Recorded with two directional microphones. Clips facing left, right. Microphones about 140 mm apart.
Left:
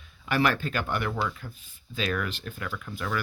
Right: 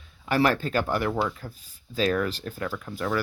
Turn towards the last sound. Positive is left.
turn(degrees=-30)  # may be behind; listen again after turning